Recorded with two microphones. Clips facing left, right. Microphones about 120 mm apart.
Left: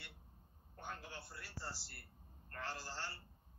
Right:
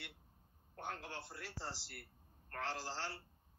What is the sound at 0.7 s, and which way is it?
Speech, 80° right.